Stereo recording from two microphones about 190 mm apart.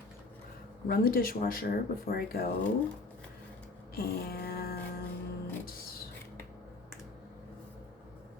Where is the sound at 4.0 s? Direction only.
55° left (ahead or behind).